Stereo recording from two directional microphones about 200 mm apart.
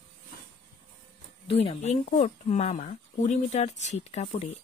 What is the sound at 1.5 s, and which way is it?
Speech, 30° left (ahead or behind).